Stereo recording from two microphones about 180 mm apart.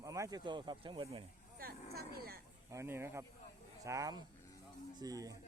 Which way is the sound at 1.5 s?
60° right (ahead or behind).